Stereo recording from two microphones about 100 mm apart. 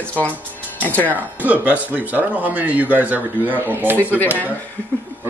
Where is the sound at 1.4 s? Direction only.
15° right (ahead or behind).